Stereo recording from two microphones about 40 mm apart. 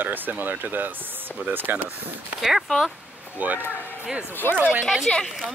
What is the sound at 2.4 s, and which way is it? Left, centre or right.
Speech, centre.